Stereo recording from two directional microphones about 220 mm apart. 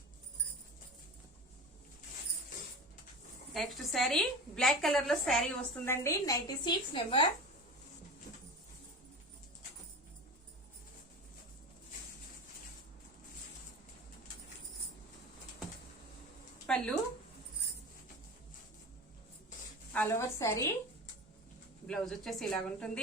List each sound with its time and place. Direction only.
3.5 s a woman's voice: centre (ahead or behind)
5.8 s a woman's voice: 10° left (ahead or behind)
16.6 s speech: 5° left (ahead or behind)
19.9 s a woman's voice: 10° left (ahead or behind)
21.8 s a woman's voice: 5° left (ahead or behind)